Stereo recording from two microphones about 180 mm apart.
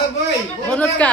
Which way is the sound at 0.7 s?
5° left (ahead or behind).